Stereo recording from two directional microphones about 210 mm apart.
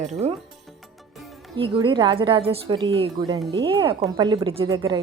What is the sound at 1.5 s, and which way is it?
Speech, 25° right (ahead or behind).